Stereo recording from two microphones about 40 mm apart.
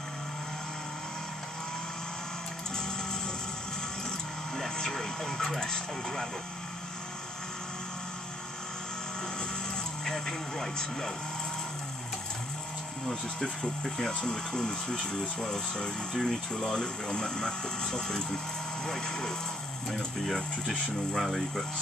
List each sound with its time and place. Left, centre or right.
4.7 s television: centre
5.6 s speech: centre
10.0 s speech: centre
13.1 s speech: centre
20.7 s speech: centre
21.2 s speech: centre